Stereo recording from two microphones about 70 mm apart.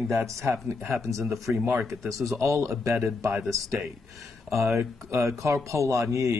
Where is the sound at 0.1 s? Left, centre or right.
Right.